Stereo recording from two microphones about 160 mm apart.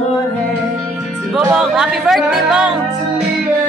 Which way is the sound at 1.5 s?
5° right (ahead or behind).